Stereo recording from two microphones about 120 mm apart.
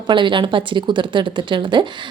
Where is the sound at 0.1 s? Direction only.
45° right (ahead or behind).